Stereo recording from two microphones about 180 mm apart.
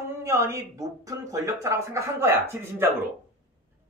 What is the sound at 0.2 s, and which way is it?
A man's voice, 15° right (ahead or behind).